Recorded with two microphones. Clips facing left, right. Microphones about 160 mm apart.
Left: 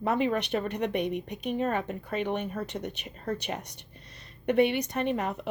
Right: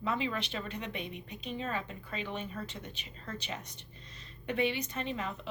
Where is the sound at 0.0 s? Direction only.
60° left (ahead or behind).